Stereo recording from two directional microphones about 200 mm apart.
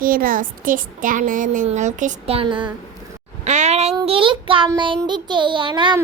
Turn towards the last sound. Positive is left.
turn(degrees=-25)  # may be behind; listen again after turning